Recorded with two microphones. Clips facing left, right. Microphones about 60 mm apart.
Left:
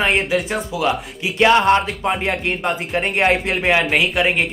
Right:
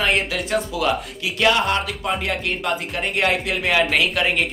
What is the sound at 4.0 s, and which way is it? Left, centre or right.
Speech, centre.